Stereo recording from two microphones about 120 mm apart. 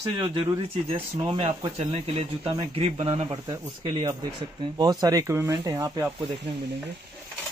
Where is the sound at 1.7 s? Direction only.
60° right (ahead or behind).